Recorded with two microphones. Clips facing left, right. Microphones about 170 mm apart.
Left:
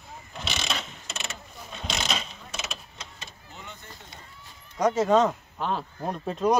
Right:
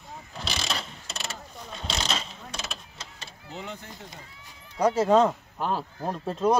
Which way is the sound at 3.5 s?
90° right.